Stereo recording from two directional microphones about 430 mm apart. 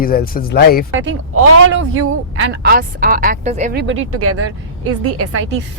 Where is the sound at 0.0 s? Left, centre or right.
Centre.